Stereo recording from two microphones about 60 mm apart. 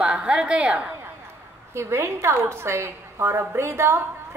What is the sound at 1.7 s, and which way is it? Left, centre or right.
A woman's voice, right.